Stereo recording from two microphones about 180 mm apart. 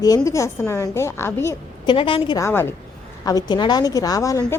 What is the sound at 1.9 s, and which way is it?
Speech, 30° left (ahead or behind).